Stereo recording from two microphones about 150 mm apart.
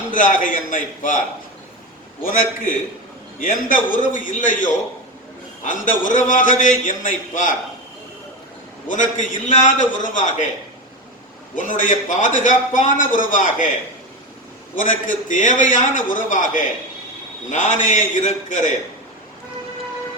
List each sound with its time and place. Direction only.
0.1 s a man's voice: 60° left (ahead or behind)
2.2 s a man's voice: 65° left (ahead or behind)
3.8 s a man's voice: 60° left (ahead or behind)
8.9 s a man's voice: 55° left (ahead or behind)
11.5 s a man's voice: 60° left (ahead or behind)
14.8 s a man's voice: 60° left (ahead or behind)